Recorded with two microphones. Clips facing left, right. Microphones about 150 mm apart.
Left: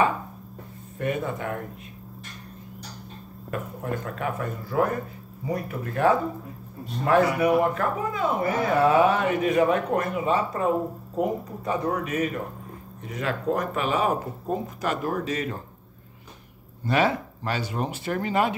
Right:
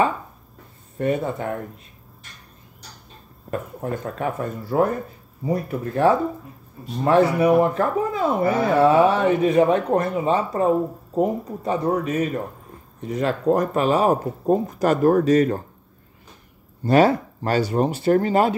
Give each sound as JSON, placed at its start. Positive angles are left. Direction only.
{"t": 0.9, "sound": "speech", "side_deg": -30}
{"t": 3.4, "sound": "speech", "side_deg": -35}
{"t": 16.8, "sound": "speech", "side_deg": -40}